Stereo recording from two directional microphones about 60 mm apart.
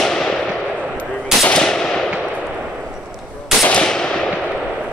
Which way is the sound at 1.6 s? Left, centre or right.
Centre.